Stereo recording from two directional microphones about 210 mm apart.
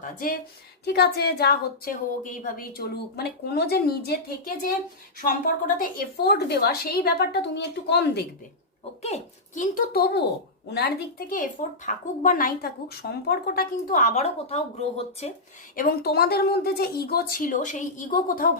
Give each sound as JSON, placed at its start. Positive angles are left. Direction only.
{"t": 0.0, "sound": "a woman's voice", "side_deg": 40}
{"t": 9.0, "sound": "speech", "side_deg": 30}
{"t": 11.3, "sound": "speech", "side_deg": 40}
{"t": 15.7, "sound": "a woman's voice", "side_deg": 45}